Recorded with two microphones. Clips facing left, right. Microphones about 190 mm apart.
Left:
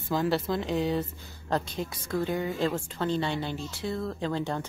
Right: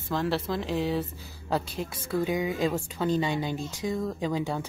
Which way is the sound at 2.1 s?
15° right (ahead or behind).